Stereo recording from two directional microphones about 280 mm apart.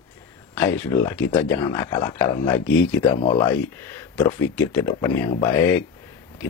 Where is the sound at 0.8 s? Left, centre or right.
Centre.